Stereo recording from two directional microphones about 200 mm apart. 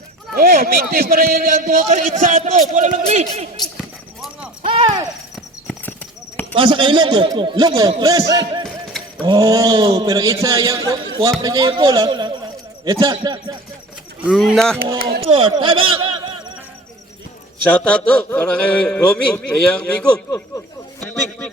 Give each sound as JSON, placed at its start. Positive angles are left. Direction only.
{"t": 0.3, "sound": "a man's voice", "side_deg": -50}
{"t": 3.8, "sound": "basketball bounce", "side_deg": -5}
{"t": 4.6, "sound": "a sound", "side_deg": -25}
{"t": 6.5, "sound": "a man's voice", "side_deg": -25}
{"t": 14.3, "sound": "a man's voice", "side_deg": 0}
{"t": 15.2, "sound": "a man's voice", "side_deg": -25}
{"t": 17.6, "sound": "a man's voice", "side_deg": 5}
{"t": 21.0, "sound": "a sound", "side_deg": 5}